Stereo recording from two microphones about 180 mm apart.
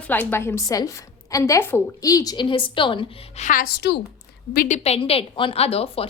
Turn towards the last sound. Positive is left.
turn(degrees=35)  # may be behind; listen again after turning